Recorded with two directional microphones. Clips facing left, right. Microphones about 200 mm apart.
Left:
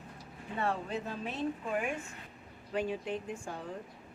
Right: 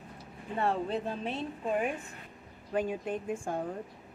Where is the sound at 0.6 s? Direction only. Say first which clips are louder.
Right 4 dB; 35° right (ahead or behind).